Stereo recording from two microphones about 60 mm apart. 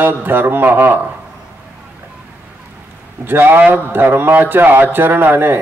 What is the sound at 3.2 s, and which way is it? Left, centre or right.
Mantra, right.